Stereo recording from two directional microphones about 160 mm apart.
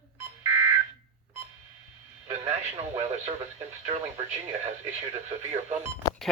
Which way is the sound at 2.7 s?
40° right (ahead or behind).